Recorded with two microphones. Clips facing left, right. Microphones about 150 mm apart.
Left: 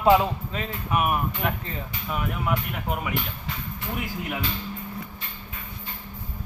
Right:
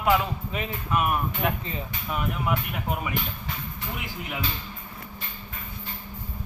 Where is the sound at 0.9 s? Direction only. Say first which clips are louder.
Left 1 dB; 10° left (ahead or behind).